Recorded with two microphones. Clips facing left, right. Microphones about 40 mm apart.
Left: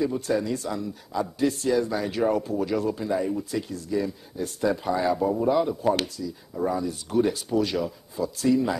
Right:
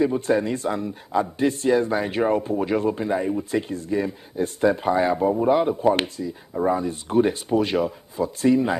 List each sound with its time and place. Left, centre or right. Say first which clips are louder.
0.0 s speech: right 4 dB; right